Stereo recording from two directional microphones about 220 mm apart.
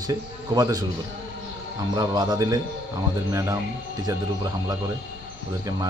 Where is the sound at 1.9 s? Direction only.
20° right (ahead or behind).